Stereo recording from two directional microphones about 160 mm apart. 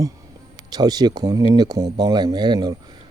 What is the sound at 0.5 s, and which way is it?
A man's voice, 25° right (ahead or behind).